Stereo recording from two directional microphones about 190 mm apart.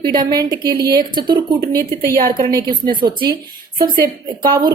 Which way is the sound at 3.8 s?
50° right (ahead or behind).